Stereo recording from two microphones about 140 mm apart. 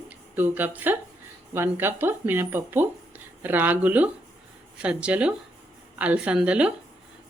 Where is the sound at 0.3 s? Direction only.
15° right (ahead or behind).